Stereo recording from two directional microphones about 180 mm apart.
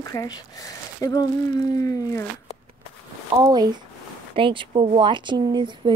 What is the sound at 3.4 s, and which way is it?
Speech, 20° right (ahead or behind).